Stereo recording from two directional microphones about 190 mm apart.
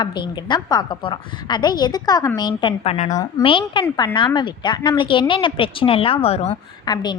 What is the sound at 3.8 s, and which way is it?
Speech, 15° left (ahead or behind).